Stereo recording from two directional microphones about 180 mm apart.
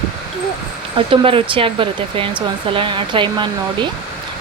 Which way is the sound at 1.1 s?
30° right (ahead or behind).